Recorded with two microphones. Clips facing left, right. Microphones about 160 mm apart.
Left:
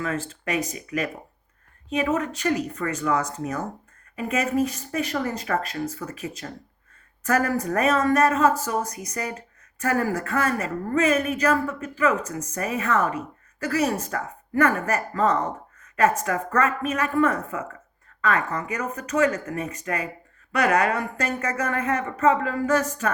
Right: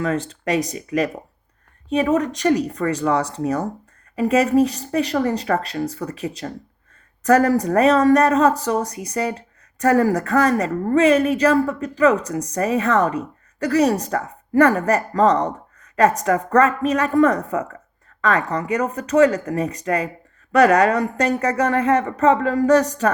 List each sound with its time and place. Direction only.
0.0 s a woman's voice: 35° right (ahead or behind)